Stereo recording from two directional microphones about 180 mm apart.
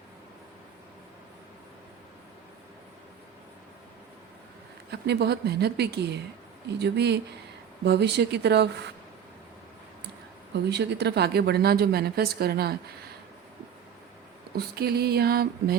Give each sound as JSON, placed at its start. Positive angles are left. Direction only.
{"t": 4.9, "sound": "speech", "side_deg": -65}
{"t": 10.5, "sound": "speech", "side_deg": -70}
{"t": 14.5, "sound": "speech", "side_deg": -60}